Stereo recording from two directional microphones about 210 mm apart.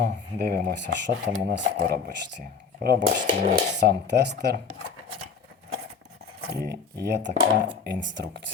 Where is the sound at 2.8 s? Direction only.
50° right (ahead or behind).